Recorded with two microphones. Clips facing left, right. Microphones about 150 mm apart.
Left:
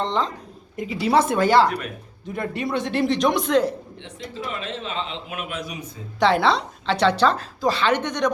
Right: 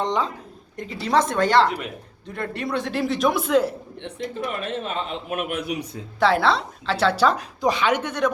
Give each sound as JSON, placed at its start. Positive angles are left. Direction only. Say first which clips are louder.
{"t": 0.0, "sound": "speech", "louder": "even", "side_deg": -15}
{"t": 0.8, "sound": "a woman's voice", "louder": "left 2 dB", "side_deg": 5}
{"t": 4.0, "sound": "a man's voice", "louder": "right 5 dB", "side_deg": -55}
{"t": 6.1, "sound": "a woman's voice", "louder": "left 1 dB", "side_deg": 0}